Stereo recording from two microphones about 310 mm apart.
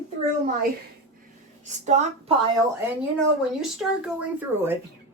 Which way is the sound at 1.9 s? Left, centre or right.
Right.